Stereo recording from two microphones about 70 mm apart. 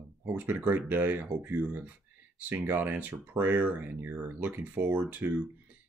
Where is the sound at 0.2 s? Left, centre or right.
Right.